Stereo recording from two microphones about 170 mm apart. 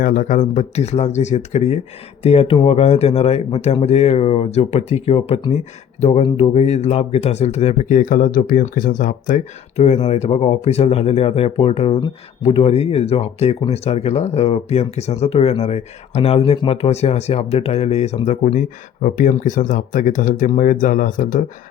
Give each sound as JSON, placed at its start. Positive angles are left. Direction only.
{"t": 0.0, "sound": "speech", "side_deg": 50}